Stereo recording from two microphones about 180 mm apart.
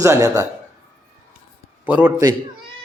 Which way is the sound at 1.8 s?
10° right (ahead or behind).